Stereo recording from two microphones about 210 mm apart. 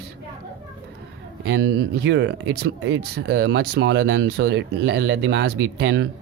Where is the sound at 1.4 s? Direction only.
55° right (ahead or behind).